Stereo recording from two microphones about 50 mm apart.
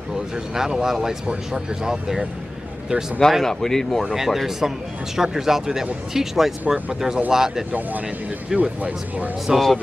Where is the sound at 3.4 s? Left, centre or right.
Centre.